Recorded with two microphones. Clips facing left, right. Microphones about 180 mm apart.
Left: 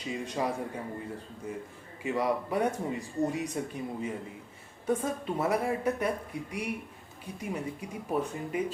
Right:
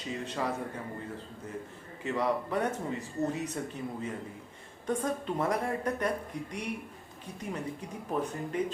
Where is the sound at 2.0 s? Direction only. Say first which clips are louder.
Left 1 dB; 10° left (ahead or behind).